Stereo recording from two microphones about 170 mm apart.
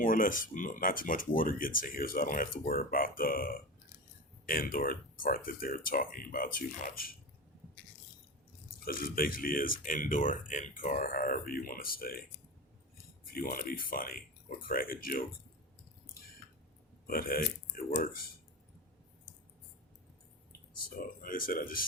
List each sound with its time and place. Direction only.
0.0 s speech: 55° left (ahead or behind)
8.8 s speech: 60° left (ahead or behind)
13.3 s speech: 60° left (ahead or behind)
17.1 s speech: 60° left (ahead or behind)
21.2 s speech: 55° left (ahead or behind)